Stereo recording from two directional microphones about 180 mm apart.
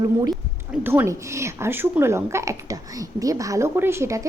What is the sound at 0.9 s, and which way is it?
A woman's voice, 15° right (ahead or behind).